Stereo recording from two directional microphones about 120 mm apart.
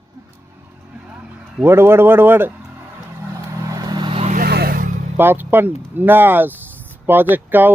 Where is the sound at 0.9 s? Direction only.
10° right (ahead or behind); by 4.2 s 35° right (ahead or behind).